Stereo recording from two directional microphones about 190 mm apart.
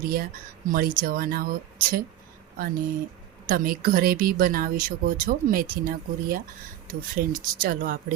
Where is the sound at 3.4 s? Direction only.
50° right (ahead or behind).